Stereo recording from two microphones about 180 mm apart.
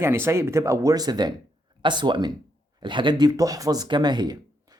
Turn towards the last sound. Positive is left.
turn(degrees=-25)  # may be behind; listen again after turning